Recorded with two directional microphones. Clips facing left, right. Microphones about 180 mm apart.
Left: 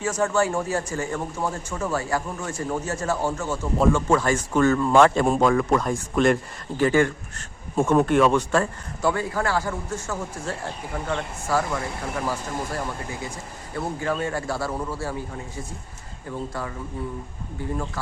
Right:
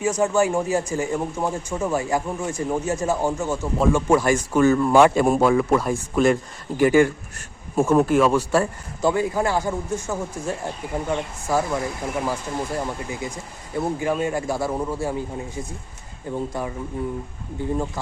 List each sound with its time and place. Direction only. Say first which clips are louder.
0.0 s a man's voice: right 3 dB; 15° right (ahead or behind)
9.0 s a man's voice: right 3 dB; 15° right (ahead or behind)
16.5 s a man's voice: right 3 dB; 15° right (ahead or behind)